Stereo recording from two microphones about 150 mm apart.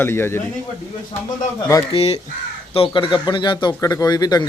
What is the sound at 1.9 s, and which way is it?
A man's voice, 40° left (ahead or behind).